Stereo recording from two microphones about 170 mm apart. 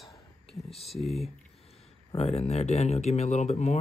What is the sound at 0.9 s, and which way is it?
Speech, centre (ahead or behind).